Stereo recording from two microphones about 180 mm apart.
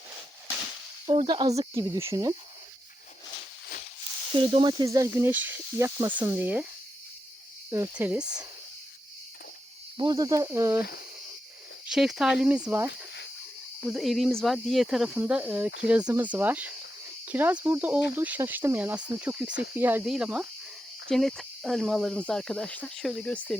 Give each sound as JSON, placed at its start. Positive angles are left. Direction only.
{"t": 1.0, "sound": "speech", "side_deg": -25}
{"t": 4.4, "sound": "speech", "side_deg": -25}
{"t": 7.7, "sound": "speech", "side_deg": -15}
{"t": 10.0, "sound": "speech", "side_deg": -20}
{"t": 11.9, "sound": "speech", "side_deg": 0}